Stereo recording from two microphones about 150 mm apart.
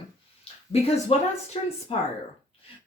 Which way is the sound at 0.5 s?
40° left (ahead or behind).